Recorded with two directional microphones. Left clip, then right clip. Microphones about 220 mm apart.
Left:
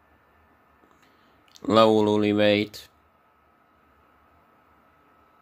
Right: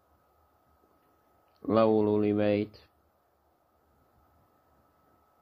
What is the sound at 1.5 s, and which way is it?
Speech, 15° left (ahead or behind).